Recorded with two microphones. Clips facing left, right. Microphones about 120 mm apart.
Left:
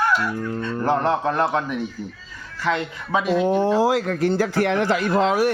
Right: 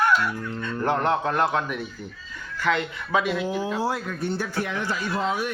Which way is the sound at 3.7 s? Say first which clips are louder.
Left 8 dB; 90° left.